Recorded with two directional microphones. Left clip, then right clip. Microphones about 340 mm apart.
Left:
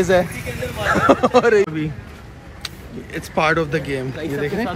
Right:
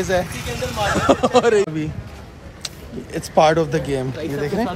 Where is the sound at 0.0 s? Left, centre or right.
Centre.